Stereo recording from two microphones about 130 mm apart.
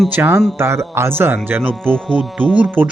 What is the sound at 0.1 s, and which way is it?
Speech, 15° right (ahead or behind).